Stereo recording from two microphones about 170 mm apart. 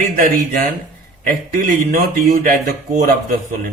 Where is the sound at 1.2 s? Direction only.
55° right (ahead or behind).